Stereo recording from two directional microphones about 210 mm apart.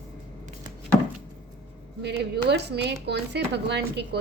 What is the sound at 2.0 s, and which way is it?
Speech, 55° right (ahead or behind).